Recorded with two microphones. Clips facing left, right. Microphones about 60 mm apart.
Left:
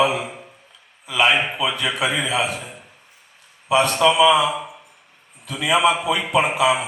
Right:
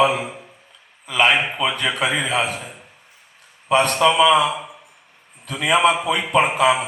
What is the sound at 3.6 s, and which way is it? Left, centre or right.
Speech, right.